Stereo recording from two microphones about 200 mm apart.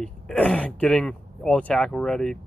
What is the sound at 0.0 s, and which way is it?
Speech, 5° left (ahead or behind).